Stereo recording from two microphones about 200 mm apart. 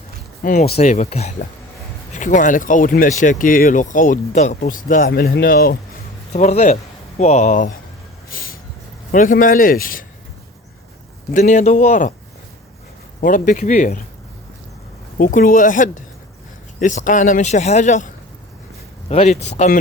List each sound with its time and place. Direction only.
0.4 s speech: 45° left (ahead or behind)
6.3 s speech: 35° left (ahead or behind)
8.3 s a sound: 45° left (ahead or behind)
9.1 s speech: 40° left (ahead or behind)
11.3 s speech: 35° left (ahead or behind)
13.2 s speech: 40° left (ahead or behind)
15.2 s speech: 45° left (ahead or behind)